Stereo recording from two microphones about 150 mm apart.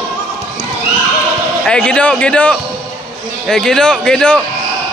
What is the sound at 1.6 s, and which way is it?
A man's voice, 5° left (ahead or behind).